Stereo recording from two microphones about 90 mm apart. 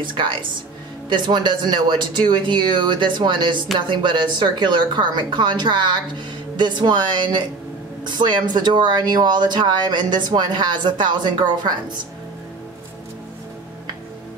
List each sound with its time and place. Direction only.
0.0 s a woman's voice: 65° right (ahead or behind)